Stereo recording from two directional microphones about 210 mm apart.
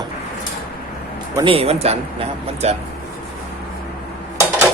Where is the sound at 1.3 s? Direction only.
25° right (ahead or behind).